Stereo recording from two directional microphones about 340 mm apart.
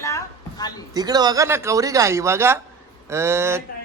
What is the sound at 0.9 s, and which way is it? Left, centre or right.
A man's voice, centre.